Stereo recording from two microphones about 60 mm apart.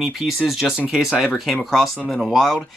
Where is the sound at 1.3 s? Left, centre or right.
Centre.